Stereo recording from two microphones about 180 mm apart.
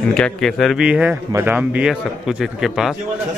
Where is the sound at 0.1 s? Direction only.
5° left (ahead or behind).